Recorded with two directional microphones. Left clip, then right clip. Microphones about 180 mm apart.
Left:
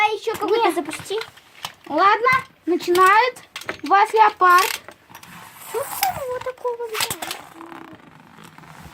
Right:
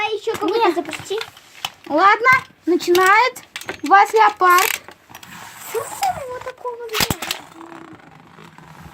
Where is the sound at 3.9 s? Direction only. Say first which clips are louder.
Right 3 dB; 40° right (ahead or behind).